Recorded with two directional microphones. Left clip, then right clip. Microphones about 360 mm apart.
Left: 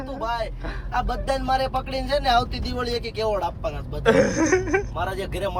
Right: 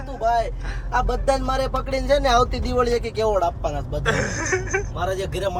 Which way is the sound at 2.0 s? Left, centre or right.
Centre.